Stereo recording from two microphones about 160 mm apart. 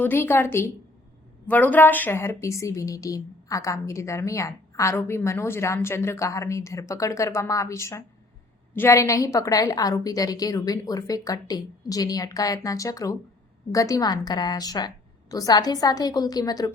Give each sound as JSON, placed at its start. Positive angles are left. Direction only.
{"t": 0.0, "sound": "a woman's voice", "side_deg": 15}